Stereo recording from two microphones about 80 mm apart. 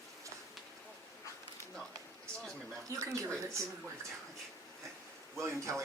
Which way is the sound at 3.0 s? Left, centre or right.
Right.